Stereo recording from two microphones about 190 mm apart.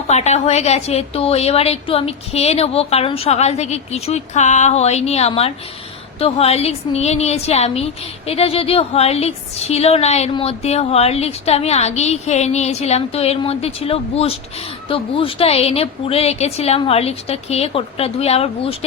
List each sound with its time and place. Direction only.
0.1 s a woman's voice: 35° left (ahead or behind)